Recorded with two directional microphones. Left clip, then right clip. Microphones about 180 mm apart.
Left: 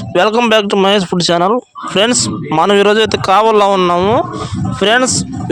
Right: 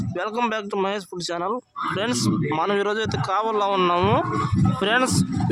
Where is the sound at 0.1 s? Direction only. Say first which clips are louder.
Left 15 dB; 45° left (ahead or behind).